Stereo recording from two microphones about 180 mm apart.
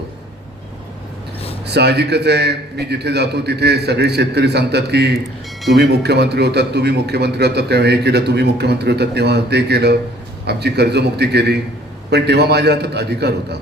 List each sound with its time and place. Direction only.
1.6 s a man's voice: 65° right (ahead or behind)